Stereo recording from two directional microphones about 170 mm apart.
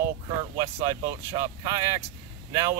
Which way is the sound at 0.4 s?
20° right (ahead or behind).